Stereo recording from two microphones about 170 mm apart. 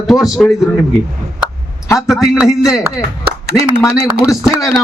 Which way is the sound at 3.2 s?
75° right (ahead or behind).